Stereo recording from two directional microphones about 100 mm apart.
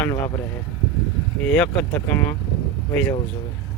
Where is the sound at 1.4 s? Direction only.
10° left (ahead or behind).